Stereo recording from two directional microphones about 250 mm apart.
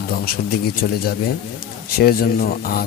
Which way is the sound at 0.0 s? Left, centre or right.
Left.